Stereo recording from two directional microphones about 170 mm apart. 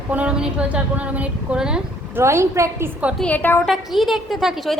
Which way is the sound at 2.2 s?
15° right (ahead or behind).